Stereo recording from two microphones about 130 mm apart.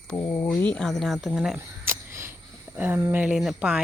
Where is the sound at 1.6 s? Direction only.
20° right (ahead or behind).